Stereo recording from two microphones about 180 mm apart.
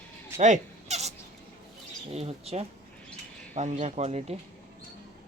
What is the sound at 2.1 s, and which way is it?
Speech, 35° right (ahead or behind).